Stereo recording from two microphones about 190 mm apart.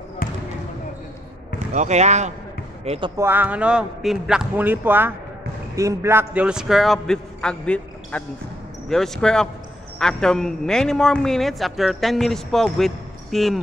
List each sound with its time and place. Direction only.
0.2 s basketball bounce: 45° left (ahead or behind)
1.7 s speech: 35° right (ahead or behind)
3.2 s a man's voice: 10° right (ahead or behind)